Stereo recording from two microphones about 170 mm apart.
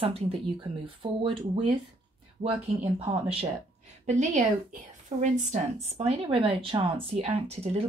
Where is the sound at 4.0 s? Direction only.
45° right (ahead or behind).